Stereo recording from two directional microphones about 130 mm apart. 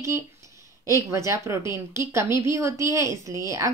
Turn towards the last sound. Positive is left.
turn(degrees=-20)  # may be behind; listen again after turning